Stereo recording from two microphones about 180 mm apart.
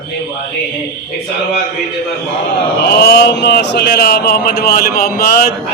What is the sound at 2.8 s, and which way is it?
Speech, 60° left (ahead or behind).